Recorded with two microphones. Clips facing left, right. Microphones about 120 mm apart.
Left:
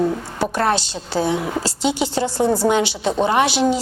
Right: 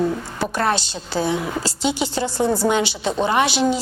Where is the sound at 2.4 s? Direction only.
30° left (ahead or behind).